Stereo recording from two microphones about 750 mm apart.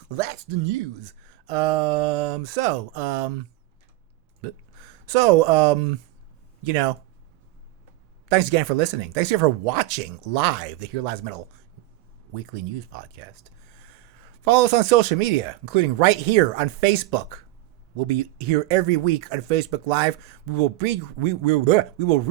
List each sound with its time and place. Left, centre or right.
0.2 s speech: right
4.4 s speech: right
8.3 s speech: right
14.4 s speech: right